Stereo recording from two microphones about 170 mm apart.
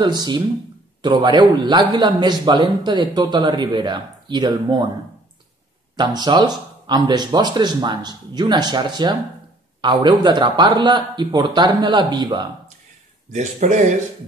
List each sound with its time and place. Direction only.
0.0 s a man's voice: 25° right (ahead or behind)
5.9 s a man's voice: 25° right (ahead or behind)
13.3 s speech: 45° right (ahead or behind)